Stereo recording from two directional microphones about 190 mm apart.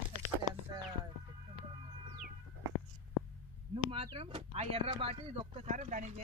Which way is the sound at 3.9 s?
30° right (ahead or behind).